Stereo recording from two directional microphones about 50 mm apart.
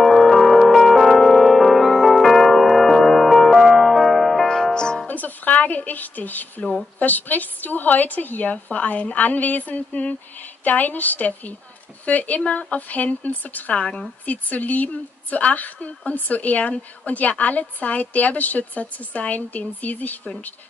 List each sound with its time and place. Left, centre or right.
0.0 s music: centre
4.7 s music: centre
5.0 s music: left
6.6 s a woman's voice: left
13.7 s speech: centre
14.2 s a woman's voice: left